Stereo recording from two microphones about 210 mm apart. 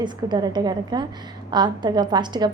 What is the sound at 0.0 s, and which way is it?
A woman's voice, 20° right (ahead or behind).